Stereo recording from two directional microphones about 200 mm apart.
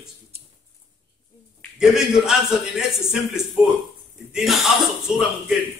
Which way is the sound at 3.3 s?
Centre (ahead or behind).